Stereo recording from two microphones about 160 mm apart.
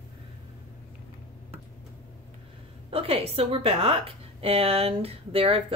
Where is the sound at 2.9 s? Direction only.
40° right (ahead or behind).